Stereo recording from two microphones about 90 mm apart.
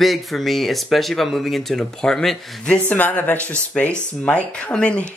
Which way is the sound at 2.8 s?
20° left (ahead or behind).